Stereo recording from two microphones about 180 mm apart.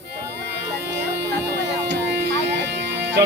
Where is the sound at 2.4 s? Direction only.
75° right (ahead or behind).